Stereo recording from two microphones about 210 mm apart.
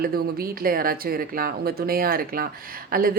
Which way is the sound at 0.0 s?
45° right (ahead or behind).